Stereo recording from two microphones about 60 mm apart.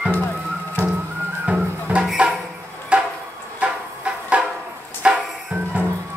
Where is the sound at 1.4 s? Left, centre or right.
Right.